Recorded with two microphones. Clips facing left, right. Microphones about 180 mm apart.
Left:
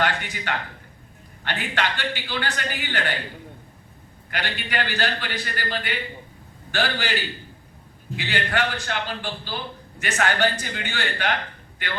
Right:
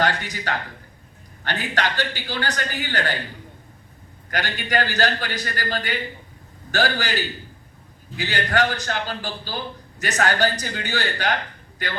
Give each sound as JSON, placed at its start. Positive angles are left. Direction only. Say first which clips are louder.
{"t": 0.0, "sound": "a man's voice", "louder": "right 2 dB", "side_deg": -40}
{"t": 4.3, "sound": "a man's voice", "louder": "right 4 dB", "side_deg": -40}
{"t": 8.1, "sound": "a man's voice", "louder": "right 3 dB", "side_deg": -40}